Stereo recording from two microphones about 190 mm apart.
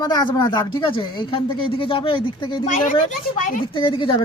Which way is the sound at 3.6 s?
25° left (ahead or behind).